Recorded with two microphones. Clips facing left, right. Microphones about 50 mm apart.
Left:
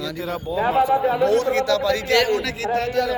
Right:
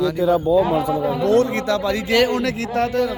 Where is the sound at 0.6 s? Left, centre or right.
Left.